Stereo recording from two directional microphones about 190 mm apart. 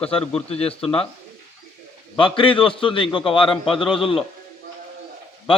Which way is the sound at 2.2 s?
25° left (ahead or behind).